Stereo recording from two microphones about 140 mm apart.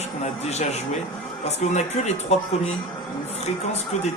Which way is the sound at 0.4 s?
50° left (ahead or behind).